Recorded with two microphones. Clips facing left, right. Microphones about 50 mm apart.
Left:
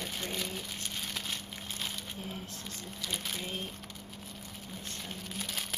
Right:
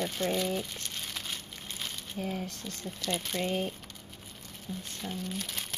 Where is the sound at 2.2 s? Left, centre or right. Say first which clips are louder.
Right 10 dB; right.